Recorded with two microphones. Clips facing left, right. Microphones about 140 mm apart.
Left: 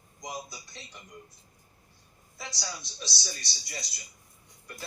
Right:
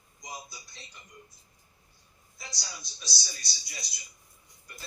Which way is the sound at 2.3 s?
70° left (ahead or behind).